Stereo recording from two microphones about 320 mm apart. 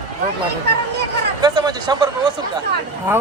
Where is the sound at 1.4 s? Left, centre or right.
Centre.